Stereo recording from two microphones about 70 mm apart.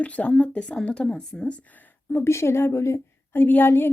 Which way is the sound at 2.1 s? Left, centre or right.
Left.